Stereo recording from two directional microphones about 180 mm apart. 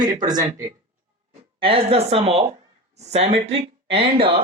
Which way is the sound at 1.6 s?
30° right (ahead or behind).